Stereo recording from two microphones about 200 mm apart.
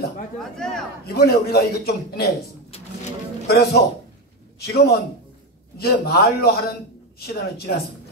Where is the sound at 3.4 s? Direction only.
50° left (ahead or behind).